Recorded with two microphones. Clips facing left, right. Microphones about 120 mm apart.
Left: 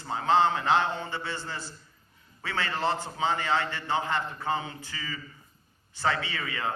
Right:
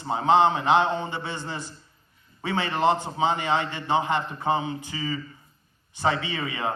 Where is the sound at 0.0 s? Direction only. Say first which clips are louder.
Right 4 dB; 20° right (ahead or behind).